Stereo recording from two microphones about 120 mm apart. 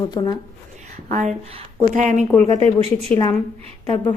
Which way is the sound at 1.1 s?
90° right.